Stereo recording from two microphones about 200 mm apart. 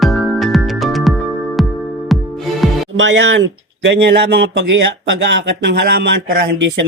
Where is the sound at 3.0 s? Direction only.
65° right (ahead or behind).